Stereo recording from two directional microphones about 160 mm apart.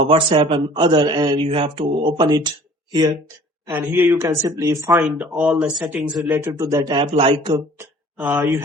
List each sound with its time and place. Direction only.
0.1 s a man's voice: 35° right (ahead or behind)
3.7 s speech: 10° right (ahead or behind)
5.1 s speech: 5° right (ahead or behind)
6.2 s a man's voice: 15° right (ahead or behind)
7.8 s speech: 10° right (ahead or behind)